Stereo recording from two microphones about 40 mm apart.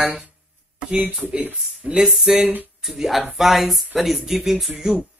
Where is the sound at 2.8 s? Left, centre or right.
Centre.